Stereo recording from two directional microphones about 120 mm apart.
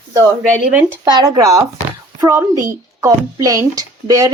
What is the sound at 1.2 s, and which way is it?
A child's voice, 30° right (ahead or behind).